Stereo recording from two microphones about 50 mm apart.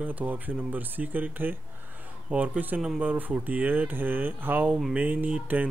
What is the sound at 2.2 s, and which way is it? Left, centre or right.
Speech, right.